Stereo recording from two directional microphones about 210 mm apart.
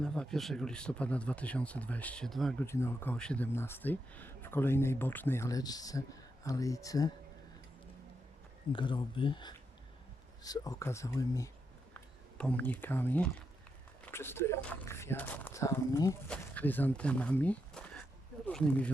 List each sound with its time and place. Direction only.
0.0 s speech: 5° left (ahead or behind)
8.7 s speech: 20° left (ahead or behind); by 18.9 s 5° left (ahead or behind)